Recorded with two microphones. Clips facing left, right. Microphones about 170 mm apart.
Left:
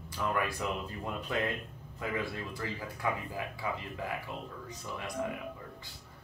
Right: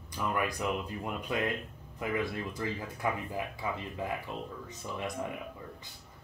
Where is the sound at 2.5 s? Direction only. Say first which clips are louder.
Right 3 dB; 20° right (ahead or behind).